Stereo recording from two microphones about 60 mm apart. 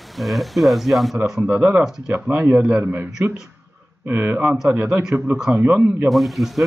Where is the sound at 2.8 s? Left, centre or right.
Right.